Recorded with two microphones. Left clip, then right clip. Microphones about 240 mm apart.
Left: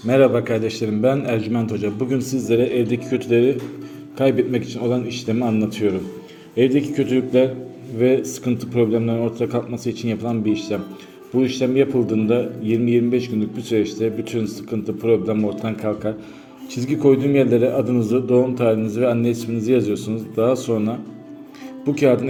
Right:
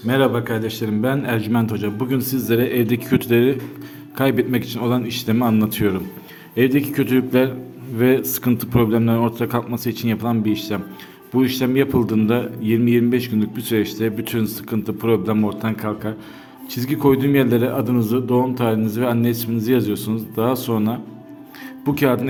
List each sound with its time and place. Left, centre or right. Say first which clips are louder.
0.1 s a man's voice: left 3 dB; centre